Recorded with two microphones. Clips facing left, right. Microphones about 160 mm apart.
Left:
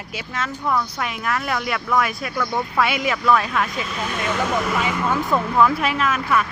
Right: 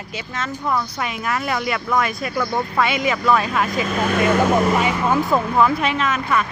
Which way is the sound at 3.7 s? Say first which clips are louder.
Right 7 dB; 45° right (ahead or behind).